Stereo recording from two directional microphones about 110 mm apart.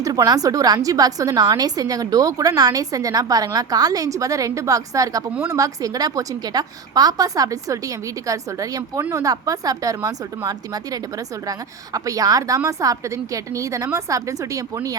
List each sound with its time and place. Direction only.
0.0 s a woman's voice: 35° right (ahead or behind)
11.9 s a woman's voice: 35° right (ahead or behind)